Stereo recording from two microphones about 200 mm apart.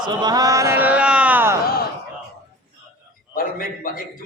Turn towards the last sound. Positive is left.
turn(degrees=45)  # may be behind; listen again after turning